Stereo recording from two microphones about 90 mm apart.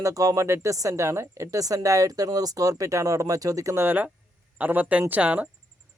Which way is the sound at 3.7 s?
25° right (ahead or behind).